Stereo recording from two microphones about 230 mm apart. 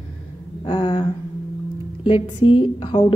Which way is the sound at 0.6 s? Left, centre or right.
Centre.